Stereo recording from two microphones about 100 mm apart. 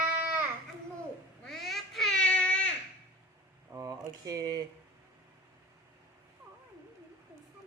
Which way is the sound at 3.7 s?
35° right (ahead or behind).